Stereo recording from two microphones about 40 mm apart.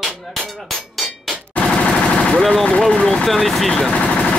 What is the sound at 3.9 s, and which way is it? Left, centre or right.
Vehicle, left.